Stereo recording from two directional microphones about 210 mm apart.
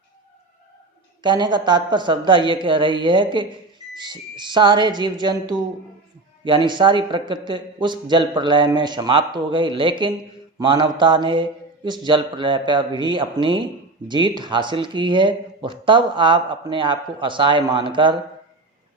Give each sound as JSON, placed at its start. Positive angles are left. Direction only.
{"t": 1.2, "sound": "speech", "side_deg": -20}